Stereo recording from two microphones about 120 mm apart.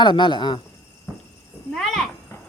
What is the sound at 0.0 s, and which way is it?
Speech, 40° left (ahead or behind).